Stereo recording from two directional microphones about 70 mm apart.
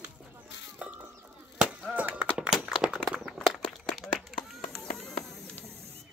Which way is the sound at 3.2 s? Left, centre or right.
Centre.